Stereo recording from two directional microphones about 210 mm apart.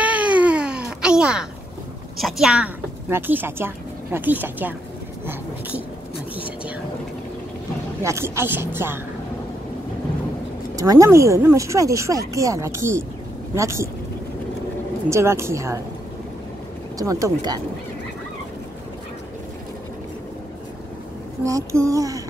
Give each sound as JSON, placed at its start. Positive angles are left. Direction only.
{"t": 0.0, "sound": "baby cry", "side_deg": -5}
{"t": 2.1, "sound": "a woman's voice", "side_deg": 0}
{"t": 6.3, "sound": "vehicle", "side_deg": -5}
{"t": 8.0, "sound": "speech", "side_deg": -15}
{"t": 10.8, "sound": "speech", "side_deg": -15}
{"t": 15.0, "sound": "speech", "side_deg": -15}
{"t": 17.0, "sound": "speech", "side_deg": -15}
{"t": 21.5, "sound": "speech", "side_deg": -15}